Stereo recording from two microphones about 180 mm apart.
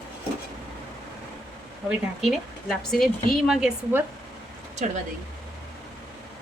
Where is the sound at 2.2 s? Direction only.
Centre (ahead or behind).